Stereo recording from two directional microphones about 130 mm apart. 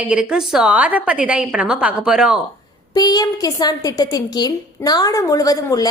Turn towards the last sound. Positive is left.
turn(degrees=25)  # may be behind; listen again after turning